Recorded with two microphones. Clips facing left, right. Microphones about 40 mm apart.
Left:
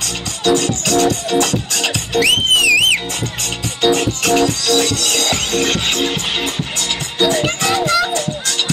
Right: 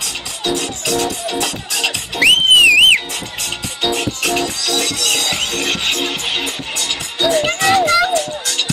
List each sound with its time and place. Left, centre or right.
0.0 s music: centre
1.4 s speech: centre
2.1 s music: right
3.8 s music: centre